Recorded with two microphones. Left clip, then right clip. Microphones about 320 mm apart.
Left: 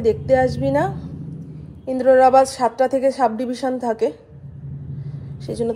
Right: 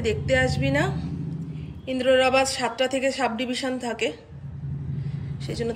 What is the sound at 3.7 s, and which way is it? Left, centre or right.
Speech, left.